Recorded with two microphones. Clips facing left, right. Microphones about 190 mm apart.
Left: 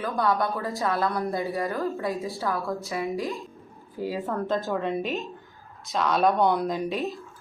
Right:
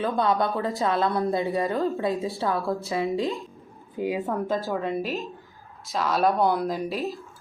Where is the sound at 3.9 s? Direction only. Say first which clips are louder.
Right 2 dB; 15° right (ahead or behind); by 7.3 s centre (ahead or behind).